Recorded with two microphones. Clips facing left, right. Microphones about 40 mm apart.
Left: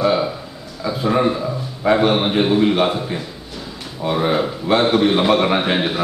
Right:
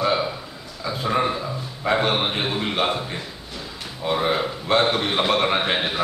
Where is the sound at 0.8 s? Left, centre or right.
Centre.